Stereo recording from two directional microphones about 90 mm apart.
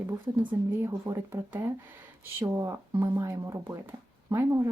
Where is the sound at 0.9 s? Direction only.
35° right (ahead or behind).